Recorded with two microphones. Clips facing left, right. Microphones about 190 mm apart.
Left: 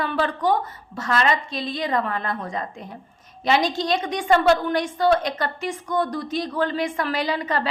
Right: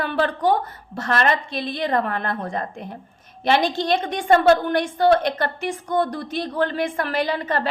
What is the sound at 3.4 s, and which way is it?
A woman's voice, 55° right (ahead or behind).